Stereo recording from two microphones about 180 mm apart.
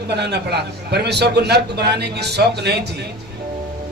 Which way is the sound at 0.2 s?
65° right (ahead or behind).